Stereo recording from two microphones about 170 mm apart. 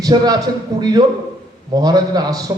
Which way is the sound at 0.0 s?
20° right (ahead or behind).